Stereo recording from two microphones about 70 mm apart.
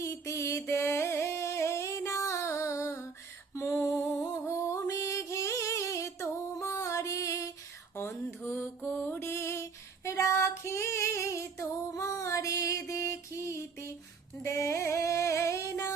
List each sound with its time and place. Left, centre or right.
0.0 s a sound: left
0.7 s music: left
8.3 s mantra: left
14.4 s music: left